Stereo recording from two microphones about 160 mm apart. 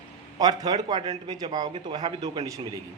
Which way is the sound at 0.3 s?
25° right (ahead or behind).